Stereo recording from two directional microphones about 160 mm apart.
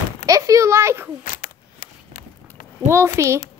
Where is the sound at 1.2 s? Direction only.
65° left (ahead or behind).